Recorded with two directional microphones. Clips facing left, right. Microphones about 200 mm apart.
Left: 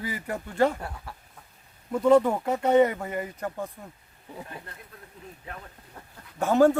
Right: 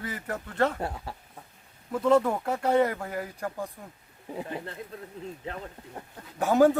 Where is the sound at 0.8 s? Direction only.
25° right (ahead or behind).